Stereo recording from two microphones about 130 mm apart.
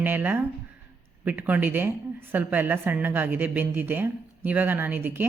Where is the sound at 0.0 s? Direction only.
15° right (ahead or behind).